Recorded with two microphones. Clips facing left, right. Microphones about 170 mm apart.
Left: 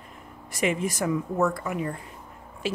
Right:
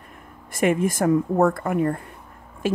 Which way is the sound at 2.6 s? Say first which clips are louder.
Right 6 dB; 50° right (ahead or behind).